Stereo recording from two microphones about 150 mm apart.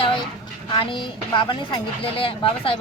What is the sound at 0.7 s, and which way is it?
Speech, 35° left (ahead or behind).